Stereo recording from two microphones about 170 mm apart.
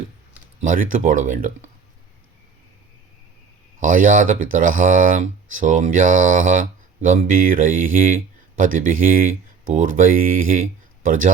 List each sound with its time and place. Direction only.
0.6 s speech: 50° right (ahead or behind)
3.8 s speech: 50° right (ahead or behind)